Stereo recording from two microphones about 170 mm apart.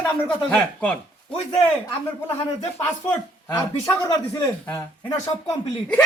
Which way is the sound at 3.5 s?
20° left (ahead or behind).